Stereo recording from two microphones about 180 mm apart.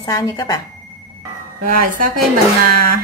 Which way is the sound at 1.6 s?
50° right (ahead or behind).